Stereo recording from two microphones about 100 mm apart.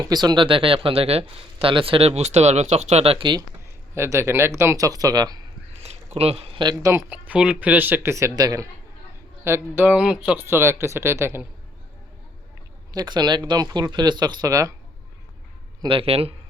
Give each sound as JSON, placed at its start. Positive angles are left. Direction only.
{"t": 0.0, "sound": "speech", "side_deg": -45}
{"t": 0.4, "sound": "speech", "side_deg": -60}
{"t": 1.7, "sound": "speech", "side_deg": -65}
{"t": 3.9, "sound": "speech", "side_deg": -25}
{"t": 4.9, "sound": "speech", "side_deg": -40}
{"t": 5.7, "sound": "a sound", "side_deg": -90}
{"t": 6.1, "sound": "speech", "side_deg": -85}
{"t": 7.1, "sound": "speech", "side_deg": -10}
{"t": 8.1, "sound": "speech", "side_deg": -35}
{"t": 9.4, "sound": "speech", "side_deg": -25}
{"t": 12.9, "sound": "speech", "side_deg": -45}
{"t": 15.9, "sound": "speech", "side_deg": -75}